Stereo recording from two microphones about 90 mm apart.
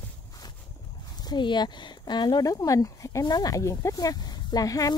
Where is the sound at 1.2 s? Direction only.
55° left (ahead or behind).